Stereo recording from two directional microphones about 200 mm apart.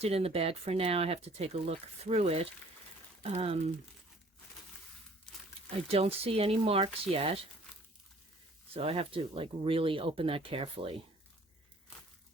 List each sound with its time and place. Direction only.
0.0 s speech: 30° right (ahead or behind)
5.9 s speech: 30° right (ahead or behind)
8.7 s speech: 30° right (ahead or behind)